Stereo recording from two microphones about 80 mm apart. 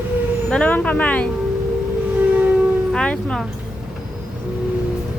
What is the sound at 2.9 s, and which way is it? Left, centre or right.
Speech, centre.